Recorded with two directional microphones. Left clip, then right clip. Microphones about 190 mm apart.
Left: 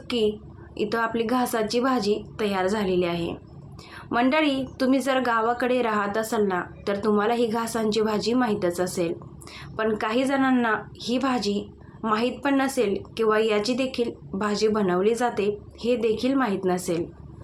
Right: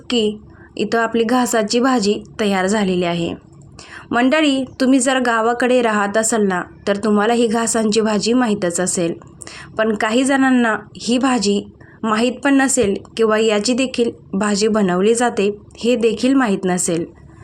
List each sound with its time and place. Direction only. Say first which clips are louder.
0.1 s a woman's voice: right 6 dB; 40° right (ahead or behind)